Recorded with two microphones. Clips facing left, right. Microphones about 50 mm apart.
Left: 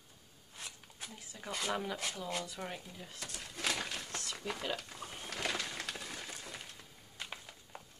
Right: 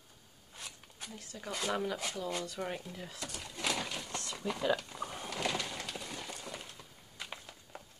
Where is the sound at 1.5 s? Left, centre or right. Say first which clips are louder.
Right 2 dB; centre.